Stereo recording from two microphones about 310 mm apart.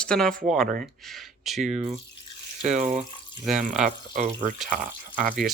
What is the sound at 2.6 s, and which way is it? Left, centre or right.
Speech, right.